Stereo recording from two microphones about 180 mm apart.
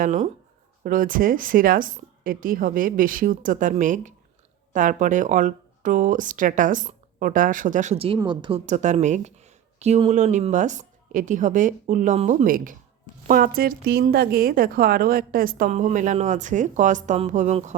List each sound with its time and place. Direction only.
0.0 s speech: 45° right (ahead or behind); by 8.6 s 30° right (ahead or behind)
8.6 s speech: 40° right (ahead or behind)